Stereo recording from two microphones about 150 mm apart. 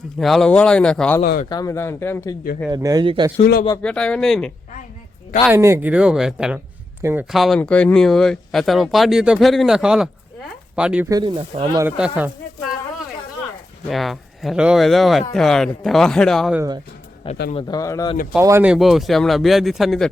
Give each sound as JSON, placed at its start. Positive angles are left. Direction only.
{"t": 0.2, "sound": "speech", "side_deg": 0}
{"t": 1.2, "sound": "speech", "side_deg": 75}
{"t": 1.5, "sound": "speech", "side_deg": 25}
{"t": 2.6, "sound": "a man's voice", "side_deg": -25}
{"t": 3.8, "sound": "speech", "side_deg": 5}
{"t": 5.5, "sound": "speech", "side_deg": -15}
{"t": 7.3, "sound": "speech", "side_deg": 0}
{"t": 11.1, "sound": "speech", "side_deg": -35}
{"t": 11.9, "sound": "speech", "side_deg": -10}
{"t": 13.8, "sound": "speech", "side_deg": 0}
{"t": 17.5, "sound": "speech", "side_deg": 30}
{"t": 18.3, "sound": "speech", "side_deg": -15}
{"t": 18.7, "sound": "speech", "side_deg": 0}